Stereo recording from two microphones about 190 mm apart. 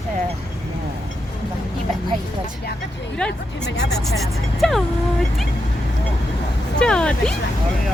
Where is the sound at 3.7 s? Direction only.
65° left (ahead or behind).